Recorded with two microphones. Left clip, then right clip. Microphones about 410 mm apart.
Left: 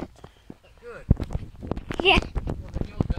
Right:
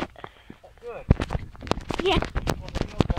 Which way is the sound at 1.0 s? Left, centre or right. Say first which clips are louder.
Right 4 dB; right.